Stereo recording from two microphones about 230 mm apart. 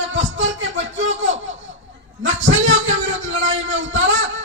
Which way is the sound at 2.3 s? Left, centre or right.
Right.